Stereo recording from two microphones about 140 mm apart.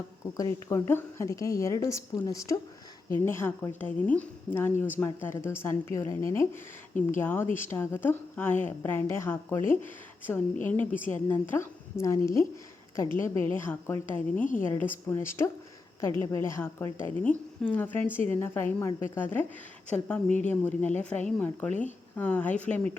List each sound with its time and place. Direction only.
0.7 s a woman's voice: 20° left (ahead or behind)